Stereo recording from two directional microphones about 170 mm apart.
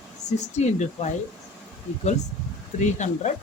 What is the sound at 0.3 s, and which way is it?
Speech, 40° left (ahead or behind).